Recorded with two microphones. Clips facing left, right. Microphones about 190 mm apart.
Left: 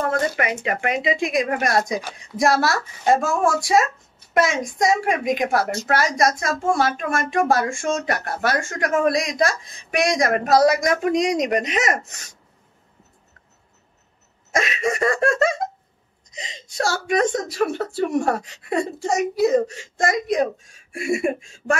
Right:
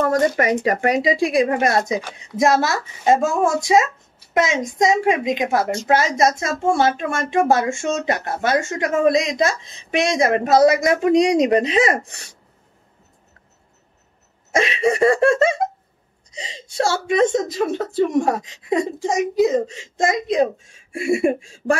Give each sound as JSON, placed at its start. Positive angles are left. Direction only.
{"t": 0.0, "sound": "speech", "side_deg": -40}
{"t": 14.5, "sound": "speech", "side_deg": -30}